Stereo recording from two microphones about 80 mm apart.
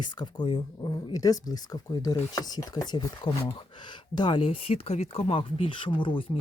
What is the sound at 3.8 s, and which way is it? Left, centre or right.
Speech, left.